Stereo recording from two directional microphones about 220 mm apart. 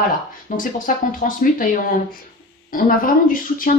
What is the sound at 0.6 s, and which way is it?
Speech, 35° left (ahead or behind).